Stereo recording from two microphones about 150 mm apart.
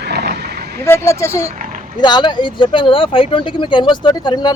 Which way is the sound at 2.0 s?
30° left (ahead or behind).